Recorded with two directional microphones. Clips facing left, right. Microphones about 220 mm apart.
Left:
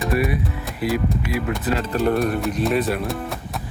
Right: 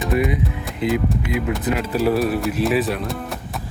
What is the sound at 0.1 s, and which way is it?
Speech, 20° right (ahead or behind).